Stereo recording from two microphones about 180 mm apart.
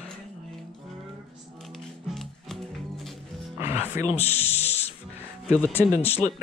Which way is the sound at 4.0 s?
35° left (ahead or behind).